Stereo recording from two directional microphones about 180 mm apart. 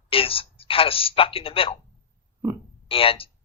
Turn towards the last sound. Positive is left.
turn(degrees=30)  # may be behind; listen again after turning